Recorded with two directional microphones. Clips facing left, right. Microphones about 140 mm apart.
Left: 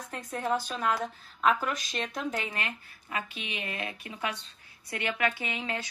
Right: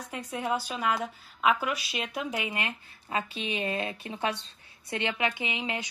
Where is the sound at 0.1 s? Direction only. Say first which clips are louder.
Even; 10° right (ahead or behind).